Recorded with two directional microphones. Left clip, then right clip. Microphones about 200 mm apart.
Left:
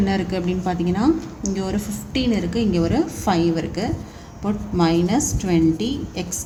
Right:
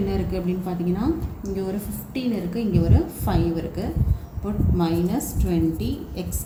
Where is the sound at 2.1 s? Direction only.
50° left (ahead or behind).